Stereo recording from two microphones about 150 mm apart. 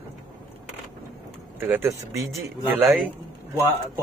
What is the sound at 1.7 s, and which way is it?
Speech, 20° right (ahead or behind).